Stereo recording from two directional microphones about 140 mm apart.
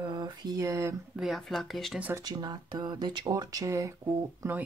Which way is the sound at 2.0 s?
10° right (ahead or behind).